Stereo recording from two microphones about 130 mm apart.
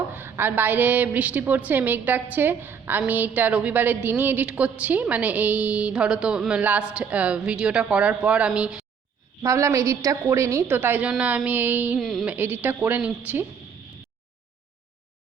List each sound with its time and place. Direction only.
0.1 s a woman's voice: 15° right (ahead or behind)
9.4 s a woman's voice: 25° right (ahead or behind)
11.9 s music: centre (ahead or behind)
12.2 s a woman's voice: 10° right (ahead or behind)